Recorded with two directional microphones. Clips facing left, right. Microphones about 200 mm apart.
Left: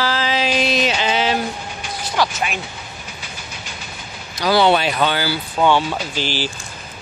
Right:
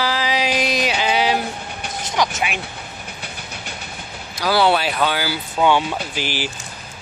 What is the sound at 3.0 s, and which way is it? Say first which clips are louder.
Train: right 1 dB; 60° right (ahead or behind).